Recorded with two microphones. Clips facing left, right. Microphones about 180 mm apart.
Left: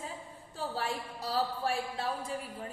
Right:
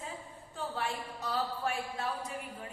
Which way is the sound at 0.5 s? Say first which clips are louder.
Left 1 dB; 35° left (ahead or behind).